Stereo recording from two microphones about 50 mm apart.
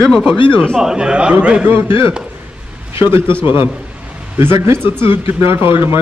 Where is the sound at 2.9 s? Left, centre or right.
Right.